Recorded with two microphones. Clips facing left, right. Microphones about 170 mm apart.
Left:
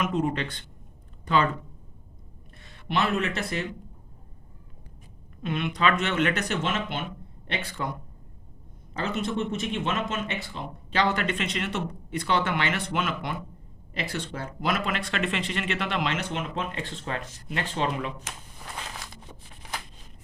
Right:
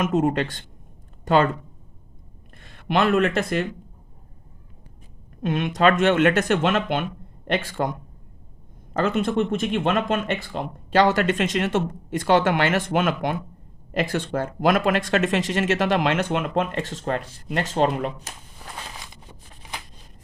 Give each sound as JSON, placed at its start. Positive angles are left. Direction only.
{"t": 0.0, "sound": "speech", "side_deg": -45}
{"t": 2.8, "sound": "speech", "side_deg": -55}
{"t": 5.4, "sound": "speech", "side_deg": -45}
{"t": 16.7, "sound": "speech", "side_deg": -45}